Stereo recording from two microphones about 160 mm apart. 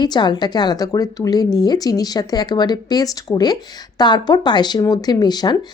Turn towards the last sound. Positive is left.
turn(degrees=25)  # may be behind; listen again after turning